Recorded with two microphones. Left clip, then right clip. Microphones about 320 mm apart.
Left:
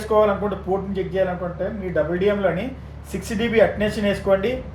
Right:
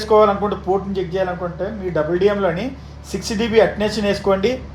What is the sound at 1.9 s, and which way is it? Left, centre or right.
Speech, right.